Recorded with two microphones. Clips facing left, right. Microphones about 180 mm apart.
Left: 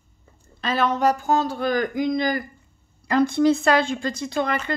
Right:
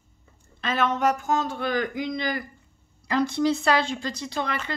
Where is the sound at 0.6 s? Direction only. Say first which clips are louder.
Left 3 dB; 35° left (ahead or behind).